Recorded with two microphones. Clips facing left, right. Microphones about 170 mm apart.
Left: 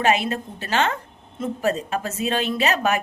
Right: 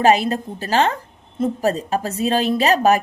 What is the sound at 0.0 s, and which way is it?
A woman's voice, 35° right (ahead or behind).